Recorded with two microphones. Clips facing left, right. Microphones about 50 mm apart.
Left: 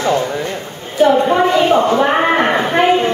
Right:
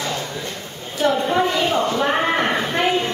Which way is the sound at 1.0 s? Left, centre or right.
Left.